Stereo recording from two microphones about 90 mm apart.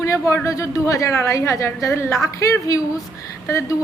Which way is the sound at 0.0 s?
35° left (ahead or behind).